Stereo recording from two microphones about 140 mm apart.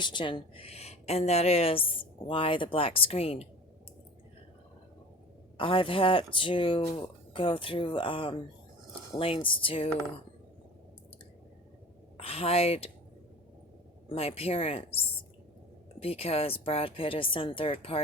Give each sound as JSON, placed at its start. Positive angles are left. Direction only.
{"t": 0.0, "sound": "speech", "side_deg": 35}
{"t": 5.5, "sound": "speech", "side_deg": 40}
{"t": 12.1, "sound": "speech", "side_deg": 45}
{"t": 14.1, "sound": "speech", "side_deg": 45}
{"t": 16.0, "sound": "speech", "side_deg": 45}